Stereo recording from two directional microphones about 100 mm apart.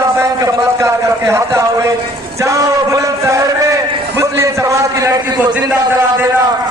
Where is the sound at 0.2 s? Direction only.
35° right (ahead or behind).